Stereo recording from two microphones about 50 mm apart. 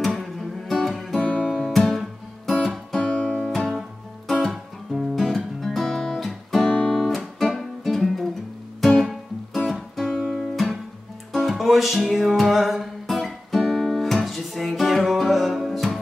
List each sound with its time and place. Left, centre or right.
0.0 s music: centre
4.3 s guitar: centre
7.3 s music: centre
10.2 s guitar: centre
11.3 s music: centre